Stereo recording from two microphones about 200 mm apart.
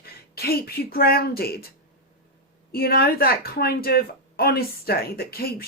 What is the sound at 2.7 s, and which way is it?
Speech, 50° left (ahead or behind).